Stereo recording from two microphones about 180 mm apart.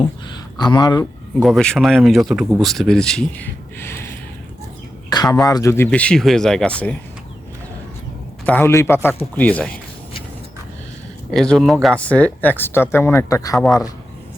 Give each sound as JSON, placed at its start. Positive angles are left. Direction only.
{"t": 0.6, "sound": "speech", "side_deg": 25}
{"t": 1.4, "sound": "a man's voice", "side_deg": 0}
{"t": 5.0, "sound": "speech", "side_deg": 20}
{"t": 8.4, "sound": "speech", "side_deg": 10}
{"t": 11.3, "sound": "speech", "side_deg": 0}